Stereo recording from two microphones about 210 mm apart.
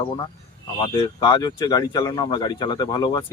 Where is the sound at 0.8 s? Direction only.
20° left (ahead or behind).